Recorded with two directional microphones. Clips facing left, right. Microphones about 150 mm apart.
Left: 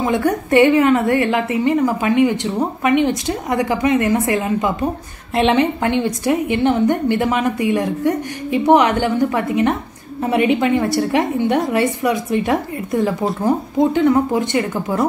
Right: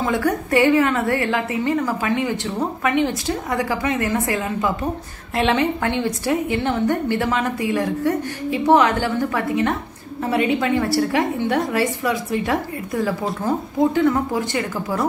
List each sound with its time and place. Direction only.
0.0 s a woman's voice: 20° left (ahead or behind)